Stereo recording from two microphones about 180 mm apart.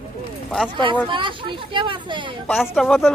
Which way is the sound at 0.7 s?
25° right (ahead or behind).